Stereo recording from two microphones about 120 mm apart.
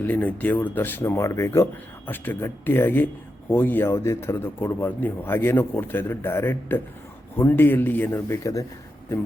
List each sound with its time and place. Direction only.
0.0 s speech: 15° left (ahead or behind)